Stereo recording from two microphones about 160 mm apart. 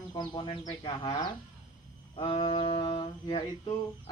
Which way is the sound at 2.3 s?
35° left (ahead or behind).